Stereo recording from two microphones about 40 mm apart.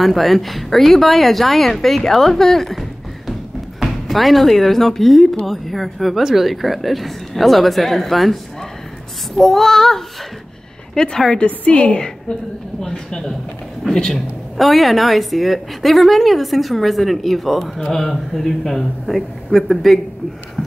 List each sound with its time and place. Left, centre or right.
0.0 s a woman's voice: centre
11.3 s a woman's voice: left
12.8 s a man's voice: centre
14.1 s a woman's voice: centre